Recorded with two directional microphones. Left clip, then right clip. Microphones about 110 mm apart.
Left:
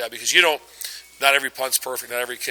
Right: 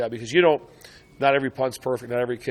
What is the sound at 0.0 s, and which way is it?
A man's voice, 15° right (ahead or behind).